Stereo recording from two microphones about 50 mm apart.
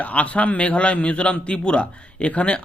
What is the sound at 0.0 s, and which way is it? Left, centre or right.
Speech, left.